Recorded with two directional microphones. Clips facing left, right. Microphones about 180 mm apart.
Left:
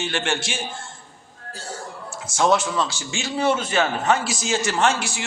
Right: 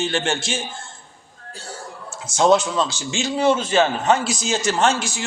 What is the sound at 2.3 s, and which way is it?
A man's voice, 20° right (ahead or behind).